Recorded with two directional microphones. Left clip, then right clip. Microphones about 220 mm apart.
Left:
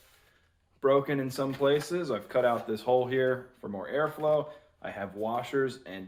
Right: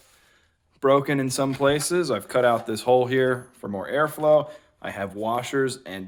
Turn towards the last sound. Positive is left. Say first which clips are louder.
# right 5 dB
turn(degrees=-55)  # may be behind; listen again after turning